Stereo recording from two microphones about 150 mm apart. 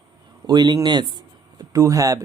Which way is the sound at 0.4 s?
25° right (ahead or behind).